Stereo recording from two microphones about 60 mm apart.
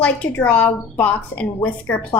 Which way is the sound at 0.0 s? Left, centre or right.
Left.